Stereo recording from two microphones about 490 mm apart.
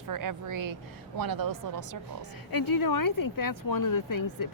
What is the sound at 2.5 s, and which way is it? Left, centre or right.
Speech, left.